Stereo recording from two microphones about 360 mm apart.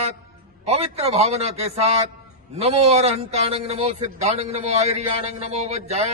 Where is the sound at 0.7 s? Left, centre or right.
Centre.